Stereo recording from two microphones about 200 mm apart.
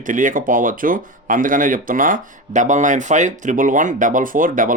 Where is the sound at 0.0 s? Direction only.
40° right (ahead or behind).